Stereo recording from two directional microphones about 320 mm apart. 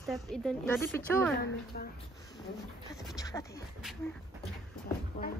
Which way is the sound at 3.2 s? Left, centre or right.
Centre.